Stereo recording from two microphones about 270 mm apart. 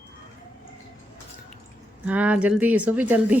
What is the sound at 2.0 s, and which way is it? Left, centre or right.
Speech, centre.